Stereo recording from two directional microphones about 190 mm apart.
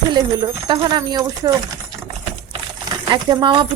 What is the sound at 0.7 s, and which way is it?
Speech, 20° right (ahead or behind).